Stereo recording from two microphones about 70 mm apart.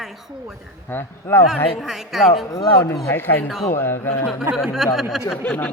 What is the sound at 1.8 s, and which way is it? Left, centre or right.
Speech, centre.